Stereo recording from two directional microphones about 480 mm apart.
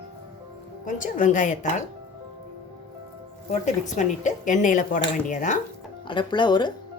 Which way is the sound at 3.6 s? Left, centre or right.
Centre.